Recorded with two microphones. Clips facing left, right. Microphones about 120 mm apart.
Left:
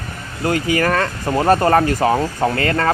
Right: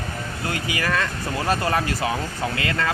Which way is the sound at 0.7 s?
45° left (ahead or behind).